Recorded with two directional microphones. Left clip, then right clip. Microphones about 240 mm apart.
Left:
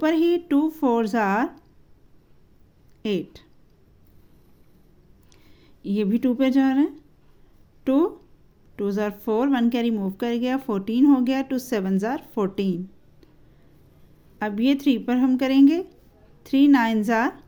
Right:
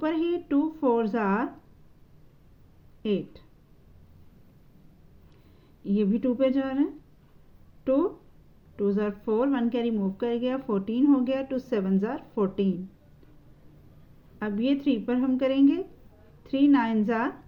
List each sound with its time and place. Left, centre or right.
0.0 s speech: left
3.0 s speech: left
5.8 s speech: left
14.3 s speech: left